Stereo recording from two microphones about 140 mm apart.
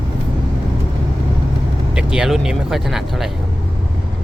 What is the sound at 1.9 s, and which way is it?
Speech, 5° right (ahead or behind).